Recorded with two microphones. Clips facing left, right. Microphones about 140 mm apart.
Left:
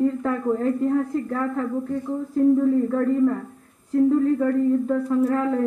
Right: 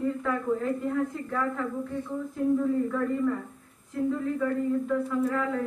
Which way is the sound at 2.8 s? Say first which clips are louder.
Left 7 dB; 40° left (ahead or behind).